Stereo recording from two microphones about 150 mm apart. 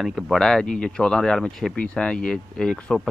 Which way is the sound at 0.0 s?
Centre (ahead or behind).